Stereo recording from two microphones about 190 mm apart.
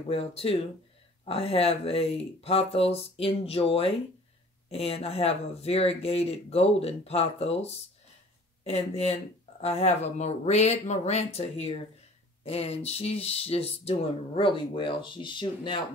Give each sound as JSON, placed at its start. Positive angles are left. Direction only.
{"t": 0.1, "sound": "speech", "side_deg": 30}